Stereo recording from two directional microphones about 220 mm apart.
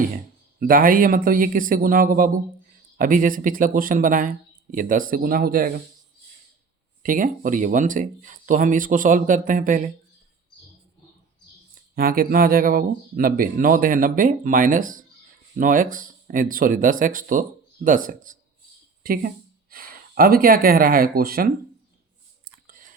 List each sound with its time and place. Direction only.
0.6 s speech: 40° right (ahead or behind)
7.0 s speech: 40° right (ahead or behind)
11.9 s speech: 40° right (ahead or behind)
22.6 s chewing: 40° right (ahead or behind)